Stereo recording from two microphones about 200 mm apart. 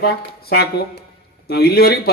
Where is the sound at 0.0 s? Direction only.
50° left (ahead or behind).